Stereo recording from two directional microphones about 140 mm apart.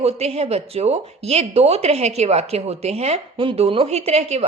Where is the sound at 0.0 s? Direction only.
50° right (ahead or behind).